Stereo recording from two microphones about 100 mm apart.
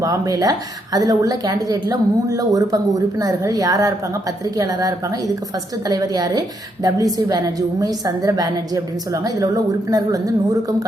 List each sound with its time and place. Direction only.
0.0 s a woman's voice: 35° right (ahead or behind)